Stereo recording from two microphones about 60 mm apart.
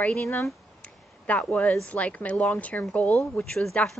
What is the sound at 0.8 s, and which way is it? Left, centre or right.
Speech, left.